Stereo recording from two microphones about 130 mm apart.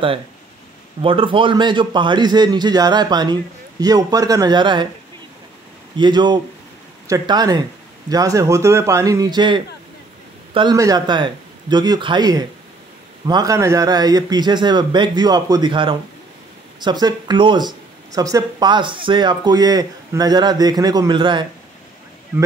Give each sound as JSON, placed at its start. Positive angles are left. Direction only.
{"t": 1.0, "sound": "a man's voice", "side_deg": -40}
{"t": 5.9, "sound": "a man's voice", "side_deg": -35}
{"t": 10.7, "sound": "speech", "side_deg": -30}